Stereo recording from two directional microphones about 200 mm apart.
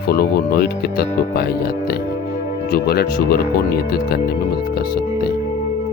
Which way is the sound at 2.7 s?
50° left (ahead or behind).